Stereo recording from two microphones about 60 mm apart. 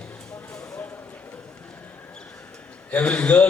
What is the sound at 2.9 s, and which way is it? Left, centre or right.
Speech, left.